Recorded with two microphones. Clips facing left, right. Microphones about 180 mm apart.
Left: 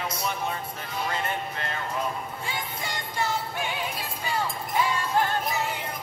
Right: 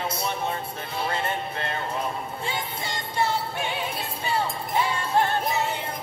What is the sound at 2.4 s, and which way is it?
Music, 25° right (ahead or behind).